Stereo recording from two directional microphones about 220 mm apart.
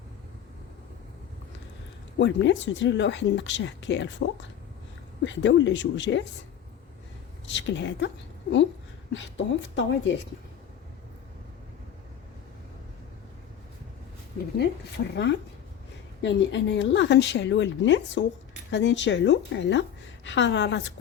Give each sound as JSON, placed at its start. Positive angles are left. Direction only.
{"t": 2.1, "sound": "speech", "side_deg": 55}
{"t": 7.5, "sound": "a woman's voice", "side_deg": 55}
{"t": 14.6, "sound": "a woman's voice", "side_deg": 50}